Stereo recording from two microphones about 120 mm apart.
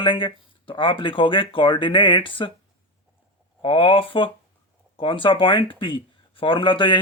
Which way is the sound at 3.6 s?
45° left (ahead or behind).